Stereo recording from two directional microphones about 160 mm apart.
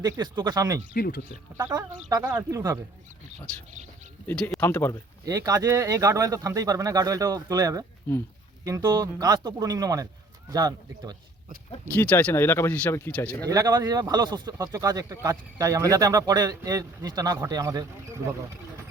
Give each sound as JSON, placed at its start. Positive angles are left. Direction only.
{"t": 0.0, "sound": "speech", "side_deg": -20}
{"t": 0.9, "sound": "speech", "side_deg": 70}
{"t": 1.5, "sound": "speech", "side_deg": -20}
{"t": 4.3, "sound": "speech", "side_deg": 10}
{"t": 5.2, "sound": "speech", "side_deg": -20}
{"t": 11.9, "sound": "speech", "side_deg": 10}
{"t": 13.4, "sound": "speech", "side_deg": -25}